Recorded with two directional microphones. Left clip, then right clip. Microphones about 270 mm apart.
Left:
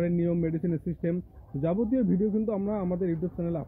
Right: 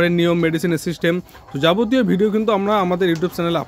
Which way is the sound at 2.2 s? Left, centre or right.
Centre.